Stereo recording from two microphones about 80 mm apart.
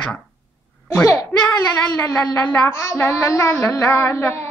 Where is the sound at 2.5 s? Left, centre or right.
Left.